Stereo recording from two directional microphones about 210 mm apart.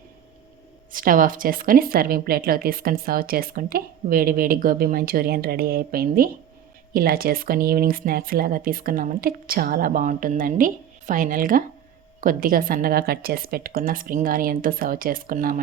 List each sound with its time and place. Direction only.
0.9 s a woman's voice: 40° right (ahead or behind)